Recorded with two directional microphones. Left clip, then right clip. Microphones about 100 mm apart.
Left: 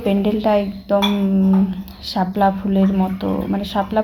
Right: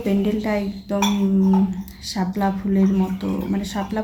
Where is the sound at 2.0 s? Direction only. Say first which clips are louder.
Left 7 dB; 20° left (ahead or behind).